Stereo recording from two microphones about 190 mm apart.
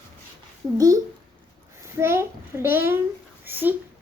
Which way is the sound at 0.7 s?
20° right (ahead or behind).